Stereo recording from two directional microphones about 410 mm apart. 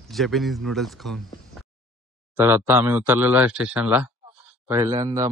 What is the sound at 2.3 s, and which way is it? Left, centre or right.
A man's voice, centre.